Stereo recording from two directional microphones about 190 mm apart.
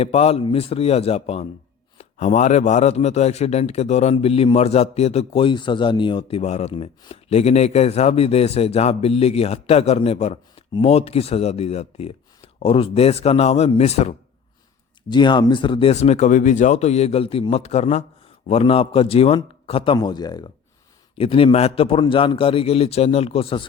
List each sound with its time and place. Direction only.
0.0 s a man's voice: 35° left (ahead or behind)
15.1 s a man's voice: 25° left (ahead or behind)